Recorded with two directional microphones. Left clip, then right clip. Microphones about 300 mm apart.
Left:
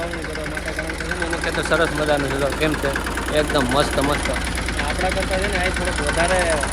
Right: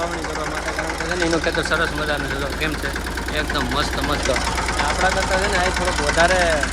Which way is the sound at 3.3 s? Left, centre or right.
Centre.